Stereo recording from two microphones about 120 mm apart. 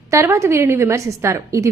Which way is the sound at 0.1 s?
25° right (ahead or behind).